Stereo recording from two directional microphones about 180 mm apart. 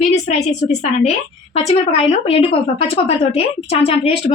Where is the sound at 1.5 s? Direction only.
35° left (ahead or behind).